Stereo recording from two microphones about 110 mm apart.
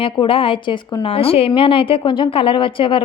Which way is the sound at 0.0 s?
55° left (ahead or behind).